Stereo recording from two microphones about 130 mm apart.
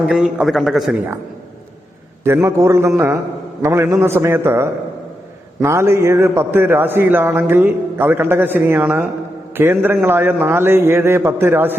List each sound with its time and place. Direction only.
0.1 s a man's voice: 5° right (ahead or behind)
2.2 s a man's voice: 20° right (ahead or behind)